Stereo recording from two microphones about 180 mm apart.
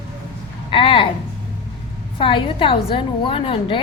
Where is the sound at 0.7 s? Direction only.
30° left (ahead or behind).